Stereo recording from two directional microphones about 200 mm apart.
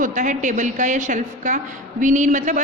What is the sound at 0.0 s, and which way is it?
A woman's voice, 40° right (ahead or behind).